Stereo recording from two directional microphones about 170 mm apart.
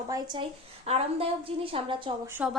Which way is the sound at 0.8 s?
35° right (ahead or behind).